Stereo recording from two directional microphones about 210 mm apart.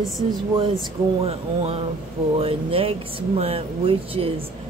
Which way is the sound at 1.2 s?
30° right (ahead or behind).